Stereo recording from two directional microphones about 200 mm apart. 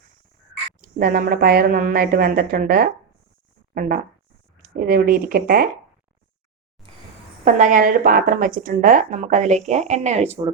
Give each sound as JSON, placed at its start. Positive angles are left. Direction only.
{"t": 0.8, "sound": "a woman's voice", "side_deg": -45}
{"t": 7.4, "sound": "speech", "side_deg": -40}